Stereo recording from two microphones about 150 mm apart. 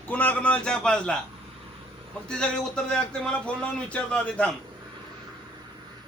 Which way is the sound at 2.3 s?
5° left (ahead or behind).